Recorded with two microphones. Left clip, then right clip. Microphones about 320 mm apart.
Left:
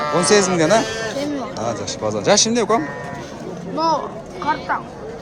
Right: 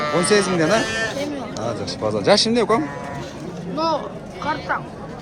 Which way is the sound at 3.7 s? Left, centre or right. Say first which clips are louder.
Left 3 dB; left.